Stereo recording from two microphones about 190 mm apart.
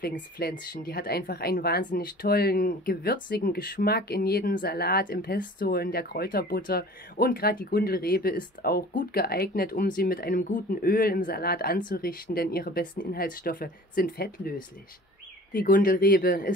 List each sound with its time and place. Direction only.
0.0 s speech: 55° left (ahead or behind)
15.5 s speech: 45° left (ahead or behind)